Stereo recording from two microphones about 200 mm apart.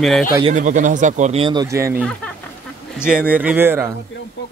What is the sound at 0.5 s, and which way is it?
Speech, 40° right (ahead or behind).